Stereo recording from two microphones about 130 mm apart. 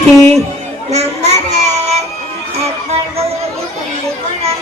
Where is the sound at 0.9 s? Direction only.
55° right (ahead or behind).